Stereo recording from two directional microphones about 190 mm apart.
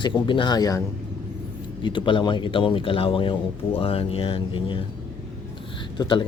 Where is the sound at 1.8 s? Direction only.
25° left (ahead or behind).